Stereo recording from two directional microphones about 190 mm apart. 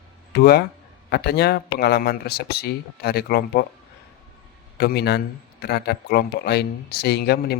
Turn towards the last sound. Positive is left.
turn(degrees=55)  # may be behind; listen again after turning